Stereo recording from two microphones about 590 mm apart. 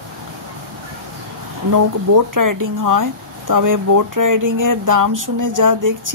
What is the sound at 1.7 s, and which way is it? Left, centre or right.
Speech, right.